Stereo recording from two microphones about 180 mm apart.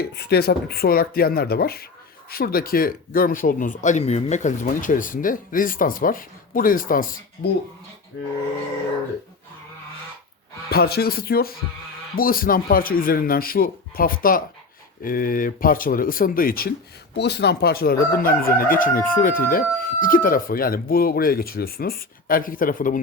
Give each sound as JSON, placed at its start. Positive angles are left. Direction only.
{"t": 0.0, "sound": "speech", "side_deg": 65}
{"t": 2.3, "sound": "crowing", "side_deg": 55}
{"t": 10.7, "sound": "speech", "side_deg": 60}
{"t": 12.1, "sound": "crowing", "side_deg": 55}
{"t": 17.2, "sound": "crowing", "side_deg": 65}